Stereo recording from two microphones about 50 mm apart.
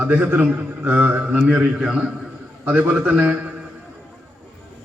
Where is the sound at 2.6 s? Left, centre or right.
Right.